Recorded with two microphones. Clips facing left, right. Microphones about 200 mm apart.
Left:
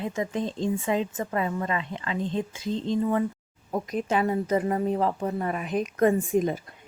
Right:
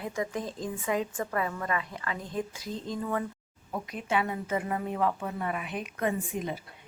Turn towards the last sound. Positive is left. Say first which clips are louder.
# left 9 dB
turn(degrees=45)  # may be behind; listen again after turning